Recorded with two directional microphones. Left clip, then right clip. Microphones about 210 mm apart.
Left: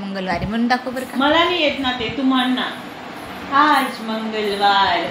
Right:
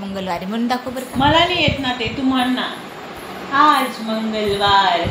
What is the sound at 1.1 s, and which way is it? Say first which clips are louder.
Speech: right 1 dB; 20° right (ahead or behind).